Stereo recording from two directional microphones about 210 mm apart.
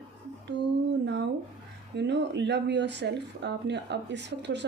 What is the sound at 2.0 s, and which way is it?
Speech, 55° right (ahead or behind).